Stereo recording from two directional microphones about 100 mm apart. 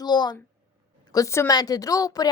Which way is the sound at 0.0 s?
45° left (ahead or behind).